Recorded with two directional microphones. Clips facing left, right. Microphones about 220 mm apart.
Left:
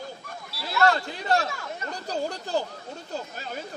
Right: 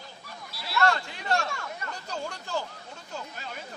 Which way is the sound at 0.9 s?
35° left (ahead or behind).